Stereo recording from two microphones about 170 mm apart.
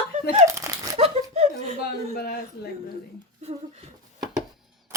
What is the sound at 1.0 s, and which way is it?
Speech, 40° right (ahead or behind).